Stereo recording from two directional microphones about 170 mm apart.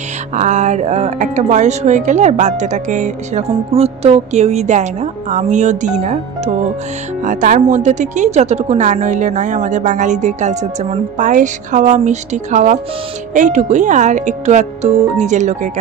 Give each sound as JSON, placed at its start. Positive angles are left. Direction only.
{"t": 0.4, "sound": "a woman's voice", "side_deg": -45}